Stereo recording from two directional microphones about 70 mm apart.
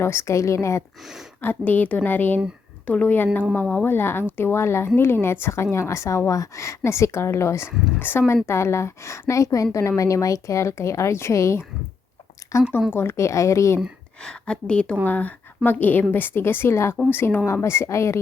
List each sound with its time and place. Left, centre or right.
0.0 s a woman's voice: left
1.4 s a woman's voice: left
12.9 s a woman's voice: left
14.3 s a woman's voice: centre
15.0 s a woman's voice: left